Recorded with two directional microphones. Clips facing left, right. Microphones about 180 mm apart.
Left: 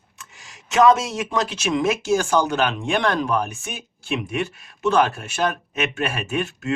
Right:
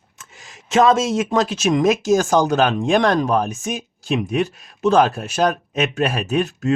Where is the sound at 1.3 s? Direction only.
40° right (ahead or behind).